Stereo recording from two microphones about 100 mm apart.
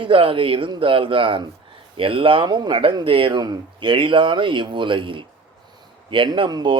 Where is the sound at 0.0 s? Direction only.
60° right (ahead or behind).